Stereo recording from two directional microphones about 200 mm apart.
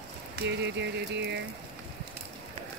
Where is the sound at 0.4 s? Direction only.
60° right (ahead or behind).